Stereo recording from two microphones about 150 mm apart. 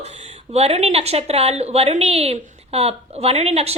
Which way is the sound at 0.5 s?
45° right (ahead or behind).